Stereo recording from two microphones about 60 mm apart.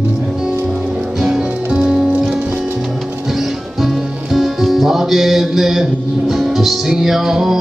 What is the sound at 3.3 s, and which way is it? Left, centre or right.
Speech, centre.